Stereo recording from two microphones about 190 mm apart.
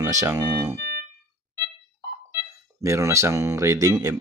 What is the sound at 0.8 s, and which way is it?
Music, 60° right (ahead or behind).